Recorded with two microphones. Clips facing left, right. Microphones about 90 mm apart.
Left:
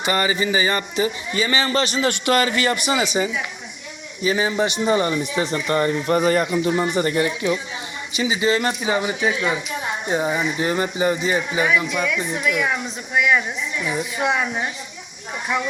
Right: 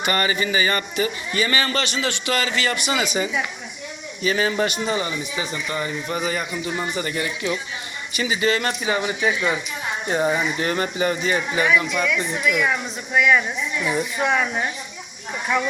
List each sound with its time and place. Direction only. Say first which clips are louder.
0.0 s a man's voice: left 1 dB; 15° left (ahead or behind)
1.8 s speech: left 4 dB; 40° left (ahead or behind)
2.6 s speech: left 2 dB; 35° left (ahead or behind)
4.2 s a man's voice: left 1 dB; 20° left (ahead or behind)
4.9 s speech: left 5 dB; 40° left (ahead or behind)
5.2 s speech: left 5 dB; 60° left (ahead or behind)
6.9 s speech: left 6 dB; 40° left (ahead or behind)
8.1 s a man's voice: left 2 dB; 20° left (ahead or behind)
13.1 s a man's voice: right 1 dB; 20° left (ahead or behind)